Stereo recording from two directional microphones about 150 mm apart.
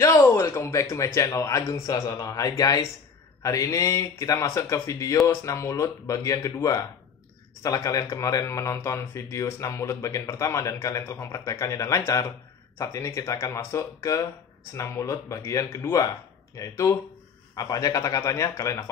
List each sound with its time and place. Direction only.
0.0 s speech: 20° left (ahead or behind)